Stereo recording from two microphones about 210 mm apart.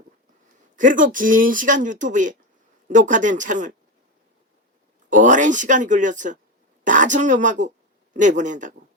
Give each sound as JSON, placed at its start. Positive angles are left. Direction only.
{"t": 0.8, "sound": "speech", "side_deg": -40}
{"t": 5.0, "sound": "speech", "side_deg": -35}